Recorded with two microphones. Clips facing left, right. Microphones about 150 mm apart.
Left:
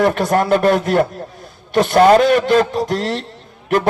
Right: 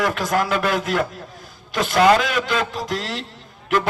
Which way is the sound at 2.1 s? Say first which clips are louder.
Left 8 dB; 40° left (ahead or behind).